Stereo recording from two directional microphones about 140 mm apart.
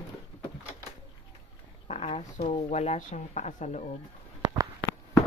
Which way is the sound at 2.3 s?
60° left (ahead or behind).